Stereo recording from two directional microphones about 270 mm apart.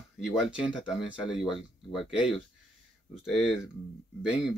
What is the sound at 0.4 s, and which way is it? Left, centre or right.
Speech, centre.